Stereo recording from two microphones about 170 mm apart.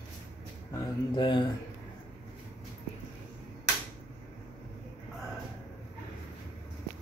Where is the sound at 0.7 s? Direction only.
25° left (ahead or behind).